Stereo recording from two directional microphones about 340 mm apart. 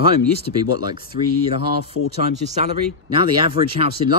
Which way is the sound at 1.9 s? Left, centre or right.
Left.